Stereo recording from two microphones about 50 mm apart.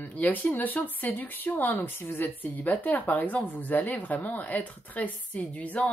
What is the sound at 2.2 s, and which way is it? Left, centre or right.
A woman's voice, left.